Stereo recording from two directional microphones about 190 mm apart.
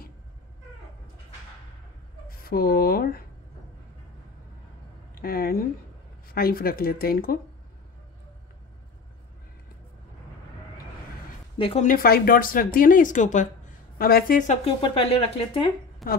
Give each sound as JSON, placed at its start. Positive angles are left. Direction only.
{"t": 2.2, "sound": "speech", "side_deg": 50}
{"t": 5.1, "sound": "speech", "side_deg": 50}
{"t": 11.5, "sound": "a woman's voice", "side_deg": 30}
{"t": 11.9, "sound": "speech", "side_deg": 50}
{"t": 13.9, "sound": "speech", "side_deg": 50}
{"t": 16.0, "sound": "a woman's voice", "side_deg": 0}